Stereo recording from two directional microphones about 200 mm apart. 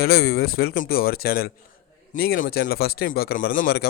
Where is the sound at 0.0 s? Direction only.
50° left (ahead or behind).